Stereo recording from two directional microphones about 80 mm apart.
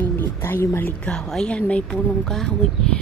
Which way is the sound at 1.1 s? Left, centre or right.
Centre.